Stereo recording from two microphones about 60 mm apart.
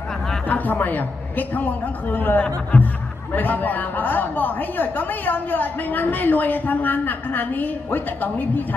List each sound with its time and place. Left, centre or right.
0.5 s a woman's voice: left